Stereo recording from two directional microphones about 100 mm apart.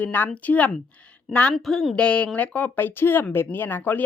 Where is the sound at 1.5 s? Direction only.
Centre (ahead or behind).